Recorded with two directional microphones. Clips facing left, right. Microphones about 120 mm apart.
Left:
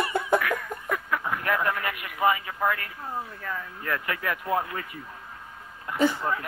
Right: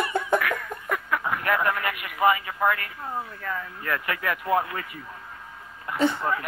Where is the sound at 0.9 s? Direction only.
70° right (ahead or behind).